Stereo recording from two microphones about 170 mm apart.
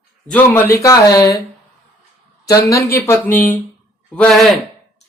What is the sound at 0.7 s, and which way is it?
Speech, 20° left (ahead or behind).